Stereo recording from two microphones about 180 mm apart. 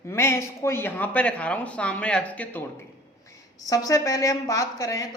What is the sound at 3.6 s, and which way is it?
A woman's voice, 20° left (ahead or behind).